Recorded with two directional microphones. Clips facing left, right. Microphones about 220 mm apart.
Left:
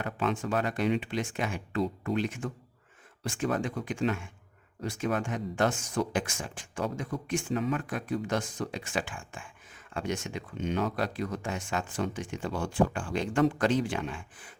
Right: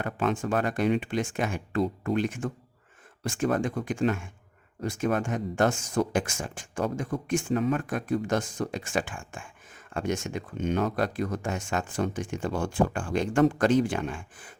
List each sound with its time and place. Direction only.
0.0 s speech: 50° right (ahead or behind)